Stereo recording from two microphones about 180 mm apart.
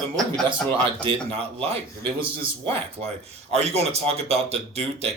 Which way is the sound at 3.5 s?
35° right (ahead or behind).